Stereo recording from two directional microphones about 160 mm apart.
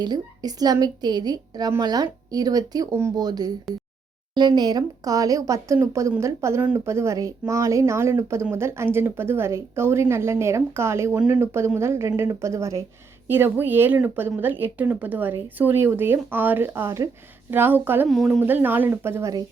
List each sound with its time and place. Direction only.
0.0 s a woman's voice: 25° right (ahead or behind)
18.1 s speech: centre (ahead or behind)
18.3 s speech: 10° right (ahead or behind)